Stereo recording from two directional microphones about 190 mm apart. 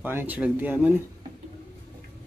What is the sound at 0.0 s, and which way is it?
Speech, 10° right (ahead or behind).